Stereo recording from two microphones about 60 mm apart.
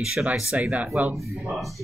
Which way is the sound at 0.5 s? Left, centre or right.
Right.